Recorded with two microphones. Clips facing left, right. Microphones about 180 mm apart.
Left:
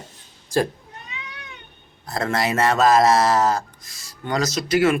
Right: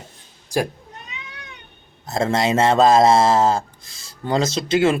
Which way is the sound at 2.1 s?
25° right (ahead or behind).